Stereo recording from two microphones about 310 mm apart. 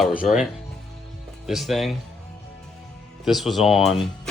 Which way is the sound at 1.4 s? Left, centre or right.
Centre.